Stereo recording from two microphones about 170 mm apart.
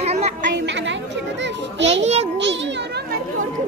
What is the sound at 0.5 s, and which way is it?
Chatter, 90° right.